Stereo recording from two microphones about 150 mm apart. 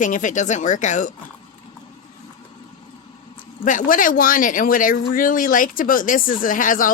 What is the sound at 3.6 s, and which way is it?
Speech, 65° left (ahead or behind).